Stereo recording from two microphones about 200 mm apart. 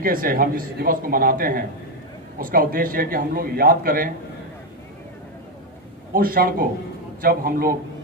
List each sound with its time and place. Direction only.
0.0 s a man's voice: 45° right (ahead or behind)
6.1 s a man's voice: 45° right (ahead or behind)